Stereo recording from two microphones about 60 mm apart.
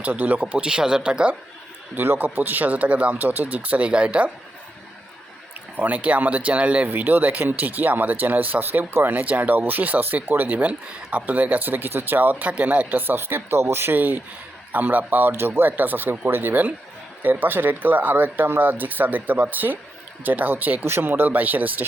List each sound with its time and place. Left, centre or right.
0.0 s speech: right
0.4 s speech: centre
2.0 s speech: right
5.7 s speech: right
9.1 s speech: right